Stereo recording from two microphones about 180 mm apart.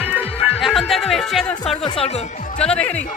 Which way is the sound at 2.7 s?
5° left (ahead or behind).